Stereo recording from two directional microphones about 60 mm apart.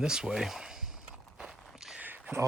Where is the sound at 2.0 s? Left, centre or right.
Right.